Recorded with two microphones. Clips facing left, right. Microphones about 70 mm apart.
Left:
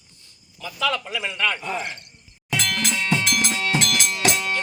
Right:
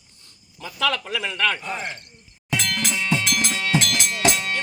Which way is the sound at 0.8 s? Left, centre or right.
Right.